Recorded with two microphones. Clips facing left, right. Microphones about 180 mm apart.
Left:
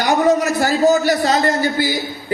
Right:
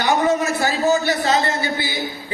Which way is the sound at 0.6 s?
40° left (ahead or behind).